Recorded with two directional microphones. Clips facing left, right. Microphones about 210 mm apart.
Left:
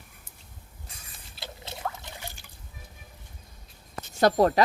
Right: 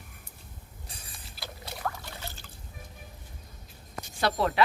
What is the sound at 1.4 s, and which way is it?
Trickle, 25° left (ahead or behind).